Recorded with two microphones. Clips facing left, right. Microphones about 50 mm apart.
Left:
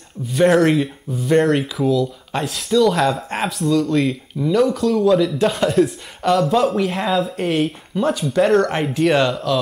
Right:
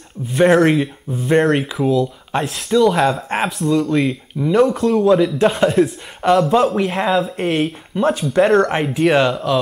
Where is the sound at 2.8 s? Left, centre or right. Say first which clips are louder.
Right 2 dB; centre.